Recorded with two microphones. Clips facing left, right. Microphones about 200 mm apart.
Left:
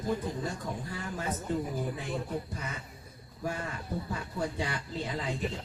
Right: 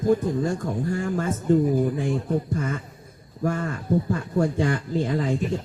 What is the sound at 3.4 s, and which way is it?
Speech, 50° right (ahead or behind).